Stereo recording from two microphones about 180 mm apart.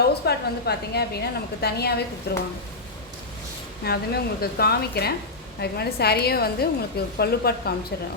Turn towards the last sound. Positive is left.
turn(degrees=60)  # may be behind; listen again after turning